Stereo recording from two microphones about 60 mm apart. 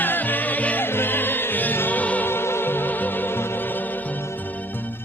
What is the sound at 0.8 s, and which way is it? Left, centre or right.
Music, left.